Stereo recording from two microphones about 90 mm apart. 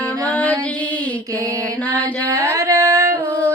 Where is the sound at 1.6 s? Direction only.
15° left (ahead or behind).